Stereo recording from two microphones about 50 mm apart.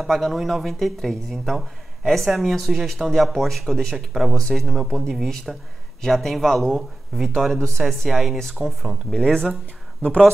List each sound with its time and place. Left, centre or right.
0.0 s speech: centre
4.8 s speech: centre
9.1 s speech: centre
10.0 s speech: centre